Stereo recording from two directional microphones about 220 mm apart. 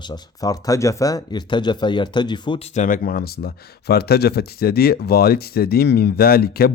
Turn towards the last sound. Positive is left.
turn(degrees=45)  # may be behind; listen again after turning